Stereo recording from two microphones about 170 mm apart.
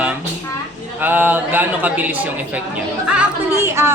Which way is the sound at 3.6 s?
15° right (ahead or behind).